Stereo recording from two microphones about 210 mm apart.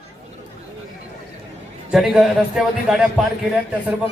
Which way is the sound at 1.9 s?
Centre (ahead or behind).